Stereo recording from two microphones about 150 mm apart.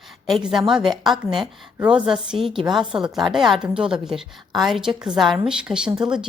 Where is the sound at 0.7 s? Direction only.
Centre (ahead or behind).